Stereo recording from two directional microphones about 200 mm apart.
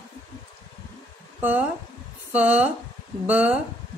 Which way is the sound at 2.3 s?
5° right (ahead or behind).